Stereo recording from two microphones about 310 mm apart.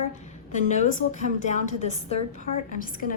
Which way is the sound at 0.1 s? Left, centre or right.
Left.